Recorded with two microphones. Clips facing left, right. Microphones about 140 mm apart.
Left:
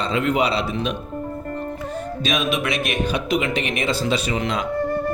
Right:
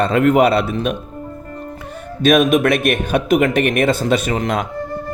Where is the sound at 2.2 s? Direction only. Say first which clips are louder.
Right 11 dB; 50° right (ahead or behind).